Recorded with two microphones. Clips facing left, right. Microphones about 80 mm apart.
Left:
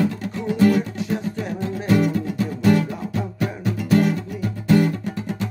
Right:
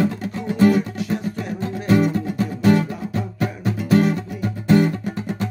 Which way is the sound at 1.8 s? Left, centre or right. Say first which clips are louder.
Right 2 dB; right.